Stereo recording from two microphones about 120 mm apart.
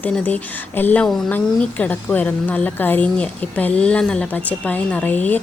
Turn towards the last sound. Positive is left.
turn(degrees=15)  # may be behind; listen again after turning